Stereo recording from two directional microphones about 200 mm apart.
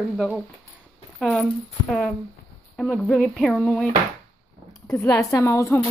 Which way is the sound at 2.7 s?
5° left (ahead or behind).